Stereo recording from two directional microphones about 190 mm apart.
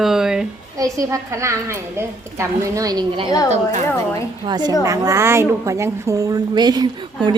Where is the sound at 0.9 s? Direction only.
15° right (ahead or behind).